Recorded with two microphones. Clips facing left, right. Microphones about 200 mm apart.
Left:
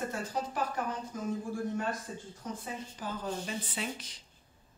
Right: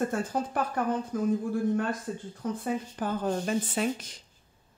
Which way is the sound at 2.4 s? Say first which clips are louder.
Right 10 dB; 60° right (ahead or behind).